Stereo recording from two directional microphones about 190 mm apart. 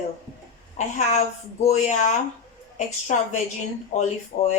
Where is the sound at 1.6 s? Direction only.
40° left (ahead or behind).